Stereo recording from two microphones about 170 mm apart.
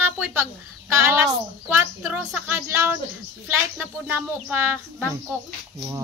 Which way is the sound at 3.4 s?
10° right (ahead or behind).